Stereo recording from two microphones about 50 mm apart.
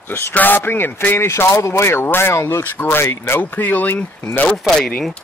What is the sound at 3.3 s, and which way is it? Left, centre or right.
Speech, left.